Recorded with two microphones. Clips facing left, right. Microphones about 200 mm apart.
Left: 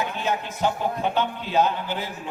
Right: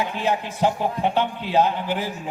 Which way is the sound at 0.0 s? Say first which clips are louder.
Right 3 dB; 30° right (ahead or behind).